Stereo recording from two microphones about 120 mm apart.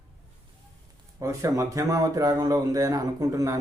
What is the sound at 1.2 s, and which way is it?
Speech, 25° right (ahead or behind).